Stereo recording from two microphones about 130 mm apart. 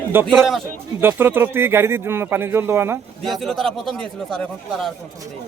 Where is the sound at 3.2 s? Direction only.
Centre (ahead or behind).